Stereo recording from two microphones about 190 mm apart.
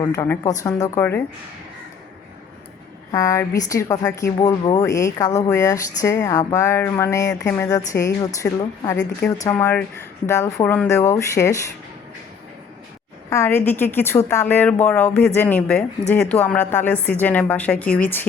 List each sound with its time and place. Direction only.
0.0 s speech: 15° left (ahead or behind)
3.1 s speech: 15° left (ahead or behind)
7.7 s speech: 15° left (ahead or behind)
13.3 s speech: 10° left (ahead or behind)